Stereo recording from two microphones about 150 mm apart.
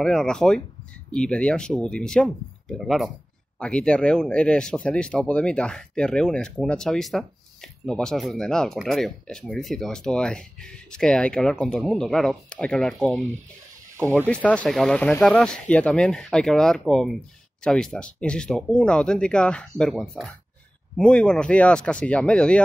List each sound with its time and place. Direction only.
0.0 s speech: 5° left (ahead or behind)